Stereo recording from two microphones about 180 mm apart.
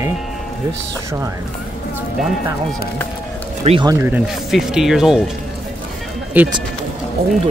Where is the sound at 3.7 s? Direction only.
25° right (ahead or behind).